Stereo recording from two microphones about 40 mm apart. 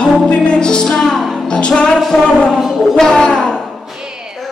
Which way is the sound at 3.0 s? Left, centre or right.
Centre.